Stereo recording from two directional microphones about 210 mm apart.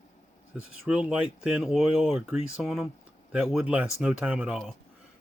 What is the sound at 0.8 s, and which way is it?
Speech, 5° right (ahead or behind).